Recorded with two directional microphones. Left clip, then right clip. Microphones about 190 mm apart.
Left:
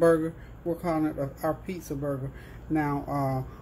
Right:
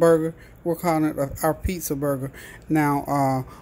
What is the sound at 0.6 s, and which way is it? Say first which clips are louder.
Speech: right 6 dB; 40° right (ahead or behind).